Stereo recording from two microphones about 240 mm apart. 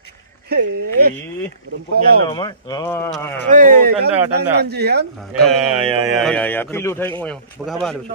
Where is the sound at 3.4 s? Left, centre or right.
Right.